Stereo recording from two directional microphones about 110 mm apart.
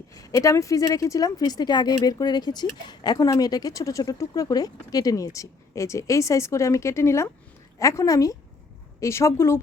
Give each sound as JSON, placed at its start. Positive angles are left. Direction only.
{"t": 0.1, "sound": "a woman's voice", "side_deg": 30}